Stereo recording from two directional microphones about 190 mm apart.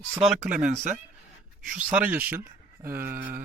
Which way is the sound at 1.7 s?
5° right (ahead or behind).